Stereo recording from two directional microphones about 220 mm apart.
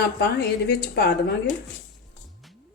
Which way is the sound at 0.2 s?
45° left (ahead or behind).